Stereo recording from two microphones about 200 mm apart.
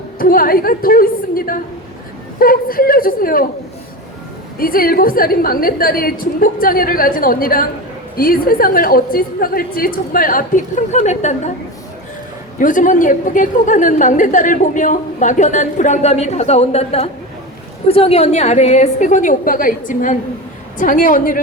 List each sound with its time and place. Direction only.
0.2 s a woman's voice: 45° left (ahead or behind)
4.5 s a woman's voice: 45° left (ahead or behind)
12.5 s a woman's voice: 40° left (ahead or behind)